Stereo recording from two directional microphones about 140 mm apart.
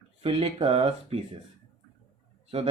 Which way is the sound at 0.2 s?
45° right (ahead or behind).